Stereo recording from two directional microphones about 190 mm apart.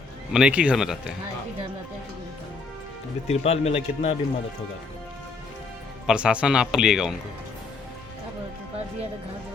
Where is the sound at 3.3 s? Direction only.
35° left (ahead or behind).